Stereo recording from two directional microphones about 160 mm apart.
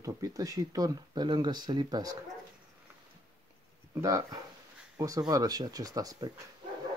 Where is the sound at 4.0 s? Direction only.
20° right (ahead or behind).